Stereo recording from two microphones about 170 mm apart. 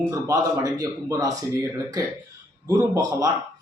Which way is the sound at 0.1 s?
20° right (ahead or behind).